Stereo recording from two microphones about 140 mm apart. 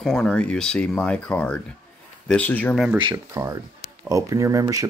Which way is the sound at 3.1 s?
20° right (ahead or behind).